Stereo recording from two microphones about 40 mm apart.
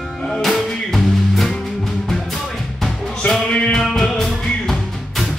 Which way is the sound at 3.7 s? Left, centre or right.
Centre.